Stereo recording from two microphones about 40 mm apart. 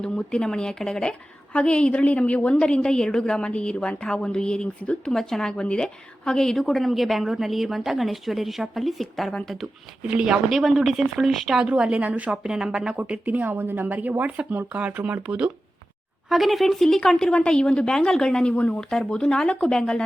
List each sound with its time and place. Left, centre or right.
0.0 s speech: left
1.5 s a woman's voice: left
6.2 s a woman's voice: centre
10.2 s speech: right
10.6 s a woman's voice: centre
11.6 s speech: right
12.3 s speech: centre
13.0 s speech: right
13.9 s speech: right
16.3 s a woman's voice: centre
17.2 s a woman's voice: left
18.5 s speech: left
18.8 s a woman's voice: centre